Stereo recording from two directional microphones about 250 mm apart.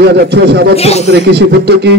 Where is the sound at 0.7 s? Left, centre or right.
Left.